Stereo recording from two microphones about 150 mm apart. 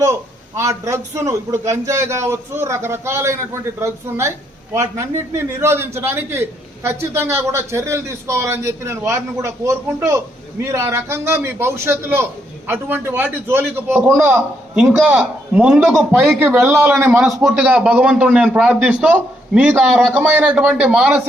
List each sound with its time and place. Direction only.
0.0 s a man's voice: 20° right (ahead or behind)
17.0 s a man's voice: 5° right (ahead or behind)